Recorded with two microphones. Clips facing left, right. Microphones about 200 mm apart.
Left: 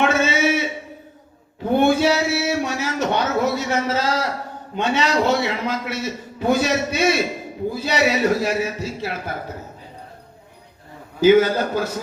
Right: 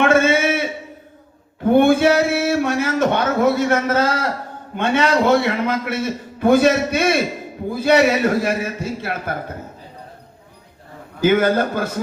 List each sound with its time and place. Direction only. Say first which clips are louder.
0.0 s a sound: right 4 dB; 55° right (ahead or behind)
1.7 s speech: right 3 dB; 55° right (ahead or behind)
11.2 s speech: left 1 dB; 55° right (ahead or behind)